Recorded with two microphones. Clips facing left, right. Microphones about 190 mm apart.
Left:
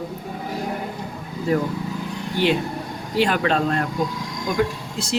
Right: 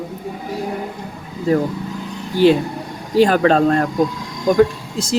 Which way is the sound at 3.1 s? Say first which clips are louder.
Right 7 dB; 40° right (ahead or behind).